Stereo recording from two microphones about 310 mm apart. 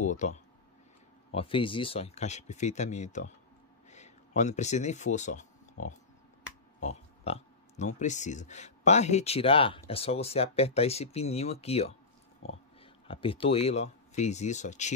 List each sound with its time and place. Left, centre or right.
0.0 s speech: left